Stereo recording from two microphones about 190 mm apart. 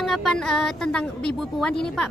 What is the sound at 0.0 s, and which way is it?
A woman's voice, centre (ahead or behind).